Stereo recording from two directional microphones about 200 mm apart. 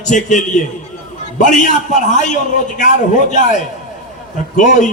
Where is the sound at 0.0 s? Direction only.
40° left (ahead or behind).